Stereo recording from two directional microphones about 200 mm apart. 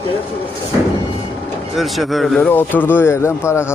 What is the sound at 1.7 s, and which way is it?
Speech, centre (ahead or behind).